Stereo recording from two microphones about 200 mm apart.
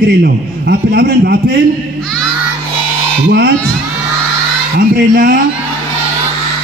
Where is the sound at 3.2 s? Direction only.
55° right (ahead or behind).